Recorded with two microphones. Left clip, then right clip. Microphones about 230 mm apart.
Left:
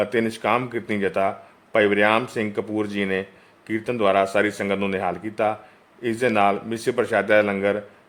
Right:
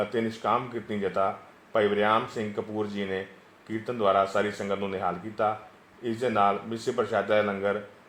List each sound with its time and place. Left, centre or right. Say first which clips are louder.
0.1 s speech: left 5 dB; left